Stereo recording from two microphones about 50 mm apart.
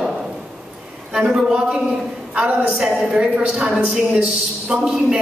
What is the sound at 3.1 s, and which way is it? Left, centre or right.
A woman's voice, right.